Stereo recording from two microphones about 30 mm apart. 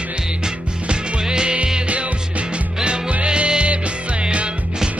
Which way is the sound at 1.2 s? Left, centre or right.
Right.